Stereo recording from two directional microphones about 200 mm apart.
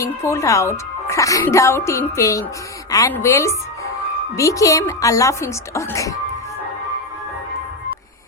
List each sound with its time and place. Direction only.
0.0 s a woman's voice: 15° left (ahead or behind)